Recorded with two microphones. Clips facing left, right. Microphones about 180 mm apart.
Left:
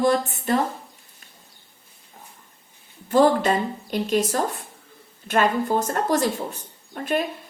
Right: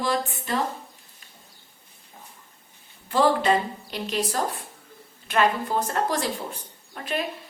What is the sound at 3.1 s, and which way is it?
A woman's voice, 45° left (ahead or behind).